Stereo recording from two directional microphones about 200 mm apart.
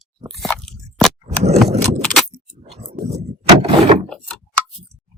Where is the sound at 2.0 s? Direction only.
Centre (ahead or behind).